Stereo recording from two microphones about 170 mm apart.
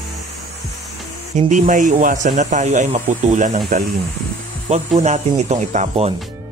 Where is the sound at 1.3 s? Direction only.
45° right (ahead or behind).